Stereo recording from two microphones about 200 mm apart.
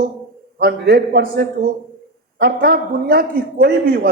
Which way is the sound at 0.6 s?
50° right (ahead or behind).